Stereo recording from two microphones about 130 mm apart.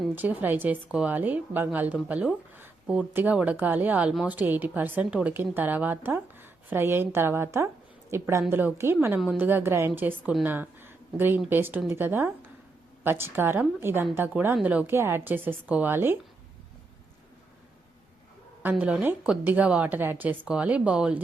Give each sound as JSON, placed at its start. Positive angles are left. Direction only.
{"t": 0.2, "sound": "a woman's voice", "side_deg": -15}
{"t": 18.6, "sound": "a woman's voice", "side_deg": -10}